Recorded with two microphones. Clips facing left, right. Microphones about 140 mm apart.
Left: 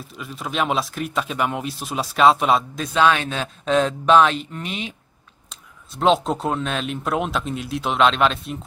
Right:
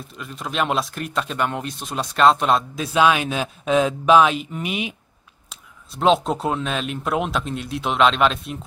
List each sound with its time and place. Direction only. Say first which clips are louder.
0.1 s speech: left 1 dB; centre (ahead or behind)
5.5 s speech: even; centre (ahead or behind)